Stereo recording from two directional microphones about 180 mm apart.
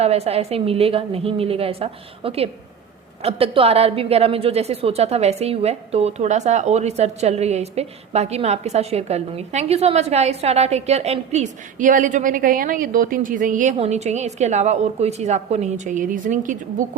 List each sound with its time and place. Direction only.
0.0 s a woman's voice: 35° right (ahead or behind)